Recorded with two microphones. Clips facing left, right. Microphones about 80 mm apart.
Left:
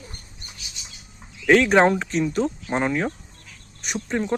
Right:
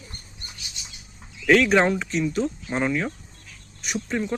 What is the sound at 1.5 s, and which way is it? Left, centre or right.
Speech, left.